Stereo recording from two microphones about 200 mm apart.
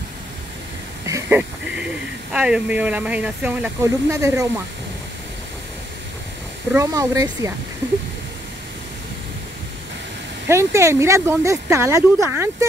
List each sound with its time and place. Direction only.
1.0 s a sound: 15° right (ahead or behind)
2.3 s speech: 5° right (ahead or behind)
6.7 s speech: 15° right (ahead or behind)
10.5 s speech: 15° right (ahead or behind)